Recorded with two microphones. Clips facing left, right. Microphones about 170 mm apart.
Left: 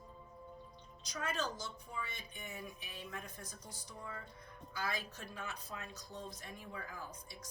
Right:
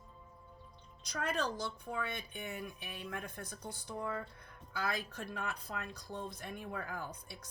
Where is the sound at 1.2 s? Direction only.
60° right (ahead or behind).